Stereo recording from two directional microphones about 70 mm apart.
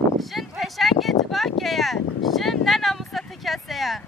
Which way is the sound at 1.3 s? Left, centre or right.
Centre.